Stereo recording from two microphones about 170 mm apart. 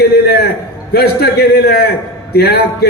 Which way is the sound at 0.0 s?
70° left (ahead or behind).